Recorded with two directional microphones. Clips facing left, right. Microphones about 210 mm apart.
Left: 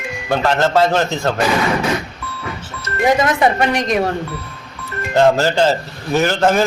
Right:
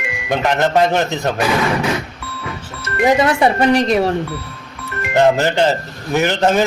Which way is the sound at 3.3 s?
30° right (ahead or behind).